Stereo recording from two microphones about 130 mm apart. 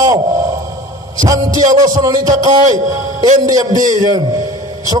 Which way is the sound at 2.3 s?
70° right (ahead or behind).